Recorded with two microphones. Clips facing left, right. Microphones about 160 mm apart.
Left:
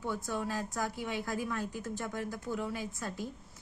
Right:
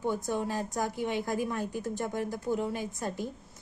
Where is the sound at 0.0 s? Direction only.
20° right (ahead or behind).